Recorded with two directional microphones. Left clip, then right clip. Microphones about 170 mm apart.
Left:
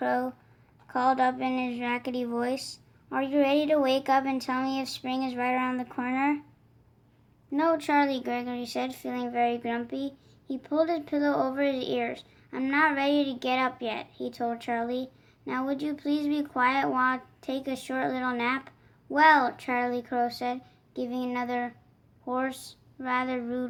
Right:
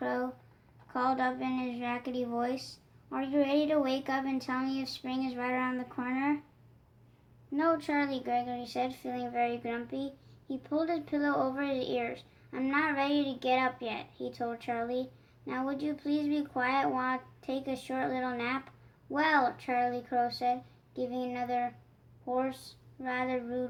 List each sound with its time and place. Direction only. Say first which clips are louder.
0.0 s a sound: left 6 dB; 40° left (ahead or behind)
0.9 s a woman's voice: left 6 dB; 40° left (ahead or behind)
7.5 s speech: left 5 dB; 50° left (ahead or behind)